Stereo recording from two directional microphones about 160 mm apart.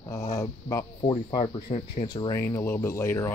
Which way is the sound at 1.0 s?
30° left (ahead or behind).